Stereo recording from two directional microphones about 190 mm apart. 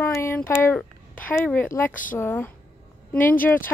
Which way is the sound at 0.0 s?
15° left (ahead or behind).